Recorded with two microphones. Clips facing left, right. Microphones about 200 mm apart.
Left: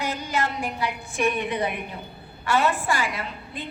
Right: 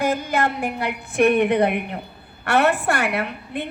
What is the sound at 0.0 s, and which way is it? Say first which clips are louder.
A woman's voice: right 6 dB; 55° right (ahead or behind).